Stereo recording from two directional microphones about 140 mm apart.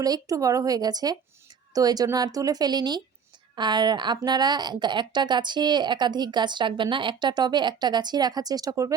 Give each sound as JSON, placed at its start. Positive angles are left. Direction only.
{"t": 0.0, "sound": "a woman's voice", "side_deg": -25}